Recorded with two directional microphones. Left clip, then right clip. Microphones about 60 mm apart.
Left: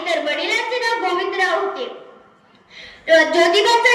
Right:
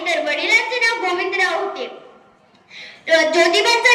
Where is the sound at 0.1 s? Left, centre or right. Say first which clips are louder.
Right 3 dB; left.